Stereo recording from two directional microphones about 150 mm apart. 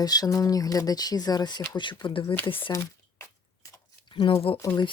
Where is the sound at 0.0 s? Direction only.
25° left (ahead or behind).